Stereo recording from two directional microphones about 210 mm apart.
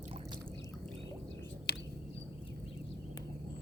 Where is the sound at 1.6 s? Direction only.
50° left (ahead or behind).